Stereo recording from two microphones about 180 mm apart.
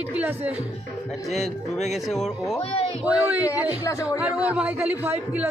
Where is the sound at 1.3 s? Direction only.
Centre (ahead or behind).